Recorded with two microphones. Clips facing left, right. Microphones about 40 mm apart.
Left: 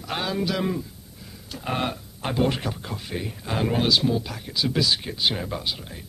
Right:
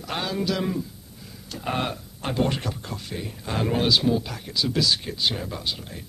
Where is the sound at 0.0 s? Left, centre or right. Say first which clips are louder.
Left 1 dB; centre.